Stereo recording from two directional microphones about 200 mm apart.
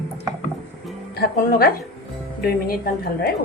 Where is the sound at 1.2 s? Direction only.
50° left (ahead or behind).